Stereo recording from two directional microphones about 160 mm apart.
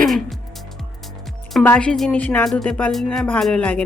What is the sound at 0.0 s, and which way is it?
Music, centre (ahead or behind).